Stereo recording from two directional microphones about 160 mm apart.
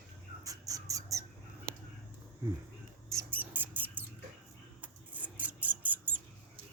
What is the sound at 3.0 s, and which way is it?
Mouse, 15° right (ahead or behind).